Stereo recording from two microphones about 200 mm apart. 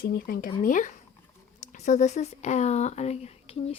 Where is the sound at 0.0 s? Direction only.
45° left (ahead or behind).